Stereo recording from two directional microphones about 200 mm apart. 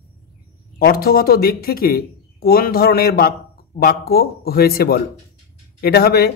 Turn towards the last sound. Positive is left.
turn(degrees=50)  # may be behind; listen again after turning